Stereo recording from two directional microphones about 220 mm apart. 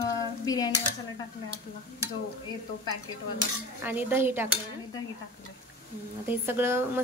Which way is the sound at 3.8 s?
10° right (ahead or behind).